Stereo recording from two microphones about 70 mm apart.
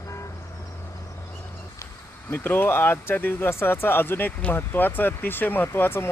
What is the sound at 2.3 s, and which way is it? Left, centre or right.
Speech, left.